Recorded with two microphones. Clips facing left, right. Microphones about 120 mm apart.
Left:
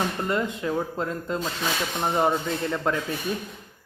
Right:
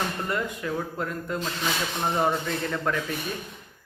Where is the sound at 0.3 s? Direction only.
25° left (ahead or behind).